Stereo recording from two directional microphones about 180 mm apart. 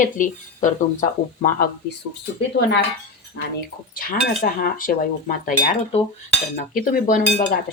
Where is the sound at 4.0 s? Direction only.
50° left (ahead or behind).